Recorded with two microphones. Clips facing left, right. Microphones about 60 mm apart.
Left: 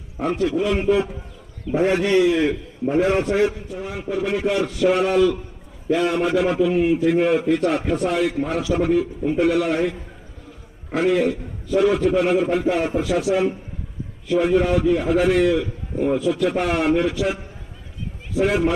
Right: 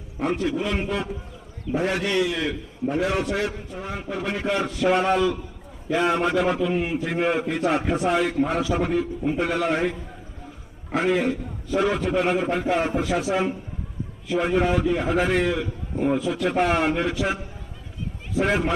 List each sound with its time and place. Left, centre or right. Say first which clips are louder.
0.2 s a man's voice: left 3 dB; centre
1.7 s a man's voice: left 6 dB; left
3.7 s a man's voice: left 4 dB; centre
10.9 s a man's voice: left 3 dB; centre
18.3 s a man's voice: left 3 dB; centre